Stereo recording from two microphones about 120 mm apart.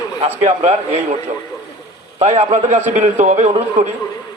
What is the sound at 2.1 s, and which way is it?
A man's voice, 75° right (ahead or behind).